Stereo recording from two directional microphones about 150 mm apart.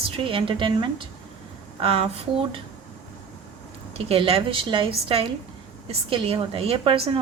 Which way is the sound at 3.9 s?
40° right (ahead or behind).